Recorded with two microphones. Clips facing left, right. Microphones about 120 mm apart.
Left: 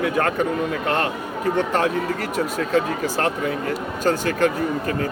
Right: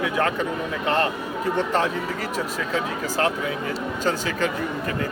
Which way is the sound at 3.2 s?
55° left (ahead or behind).